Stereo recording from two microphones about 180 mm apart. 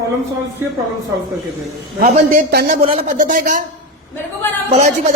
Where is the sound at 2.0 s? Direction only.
55° right (ahead or behind).